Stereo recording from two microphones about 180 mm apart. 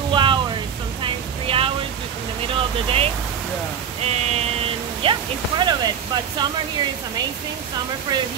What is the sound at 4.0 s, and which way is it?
Speech, 35° right (ahead or behind).